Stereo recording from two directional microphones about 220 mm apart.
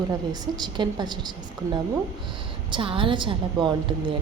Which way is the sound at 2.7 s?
25° right (ahead or behind).